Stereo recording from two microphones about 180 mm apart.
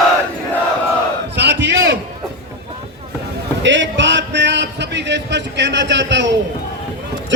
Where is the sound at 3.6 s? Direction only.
90° right.